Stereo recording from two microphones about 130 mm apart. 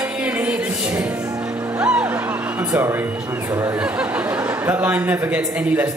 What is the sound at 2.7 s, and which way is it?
Speech, 20° right (ahead or behind).